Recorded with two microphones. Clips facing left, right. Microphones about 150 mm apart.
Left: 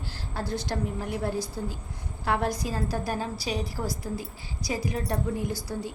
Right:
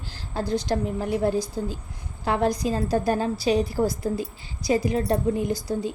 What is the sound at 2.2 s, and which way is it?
A woman's voice, 20° right (ahead or behind).